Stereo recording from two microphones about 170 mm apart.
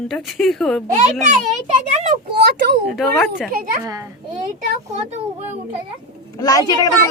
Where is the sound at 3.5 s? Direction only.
55° right (ahead or behind).